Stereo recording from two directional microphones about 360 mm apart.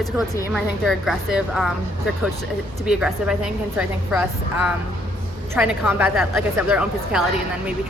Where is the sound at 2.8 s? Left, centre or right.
Centre.